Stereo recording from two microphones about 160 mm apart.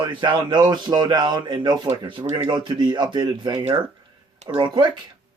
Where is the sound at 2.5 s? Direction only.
30° right (ahead or behind).